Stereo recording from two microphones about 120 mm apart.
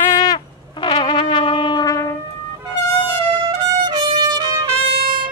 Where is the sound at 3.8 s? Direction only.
35° right (ahead or behind).